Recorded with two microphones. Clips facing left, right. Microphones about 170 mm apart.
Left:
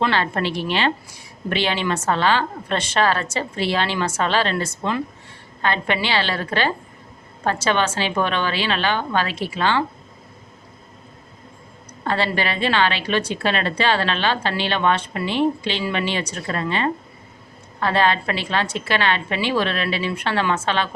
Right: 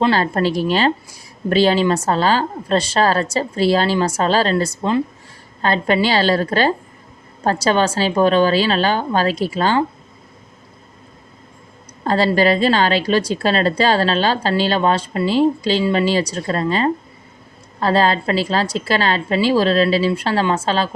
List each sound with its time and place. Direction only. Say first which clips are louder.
0.0 s a woman's voice: right 5 dB; 35° right (ahead or behind)
12.0 s a woman's voice: right 7 dB; 40° right (ahead or behind)